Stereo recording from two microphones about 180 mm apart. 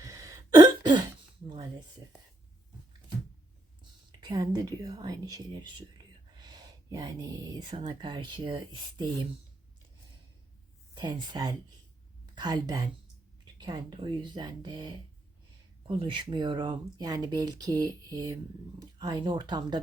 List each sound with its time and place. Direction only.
0.0 s a sound: 20° right (ahead or behind)
4.2 s speech: 20° right (ahead or behind)
10.9 s a woman's voice: 25° right (ahead or behind)